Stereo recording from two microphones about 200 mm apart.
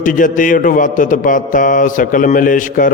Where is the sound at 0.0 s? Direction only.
40° left (ahead or behind).